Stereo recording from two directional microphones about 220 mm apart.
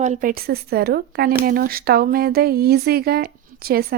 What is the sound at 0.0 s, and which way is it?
Speech, 35° right (ahead or behind).